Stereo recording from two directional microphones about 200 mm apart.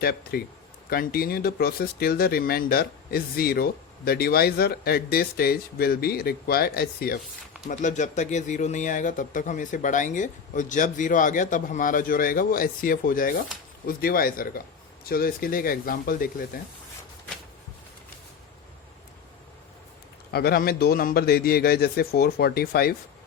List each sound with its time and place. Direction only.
0.0 s speech: 50° left (ahead or behind)
7.7 s speech: 35° left (ahead or behind)
20.3 s speech: 50° left (ahead or behind)